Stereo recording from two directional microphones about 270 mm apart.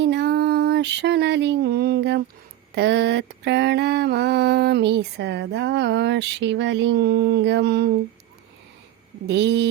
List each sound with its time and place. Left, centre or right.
0.0 s a sound: right
2.7 s mantra: right
9.2 s mantra: right